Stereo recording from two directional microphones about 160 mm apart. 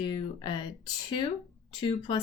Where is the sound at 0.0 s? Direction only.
30° left (ahead or behind).